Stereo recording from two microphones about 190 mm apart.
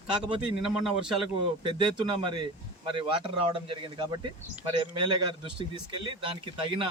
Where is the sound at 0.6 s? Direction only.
Centre (ahead or behind).